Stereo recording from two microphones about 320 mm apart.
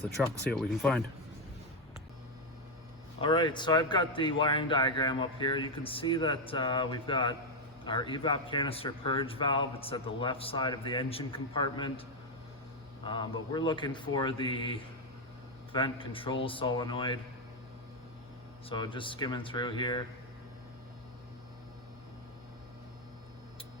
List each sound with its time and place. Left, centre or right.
0.2 s speech: centre
3.2 s speech: centre
13.1 s speech: centre
18.7 s speech: centre